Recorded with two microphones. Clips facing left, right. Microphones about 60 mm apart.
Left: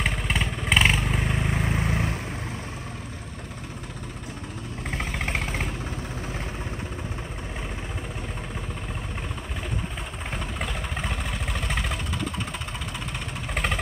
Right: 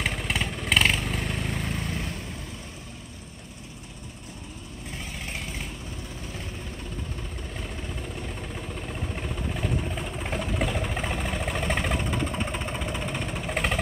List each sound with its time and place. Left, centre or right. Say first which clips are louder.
0.0 s vehicle: left 2 dB; centre; by 1.9 s left
1.9 s vehicle: left 5 dB; left
4.9 s vehicle: left 7 dB; left
9.1 s vehicle: right 2 dB; centre